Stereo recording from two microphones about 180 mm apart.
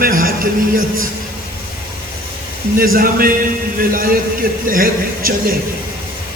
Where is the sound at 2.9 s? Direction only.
50° right (ahead or behind).